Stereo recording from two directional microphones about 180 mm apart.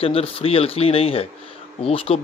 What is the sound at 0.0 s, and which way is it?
Speech, 30° left (ahead or behind).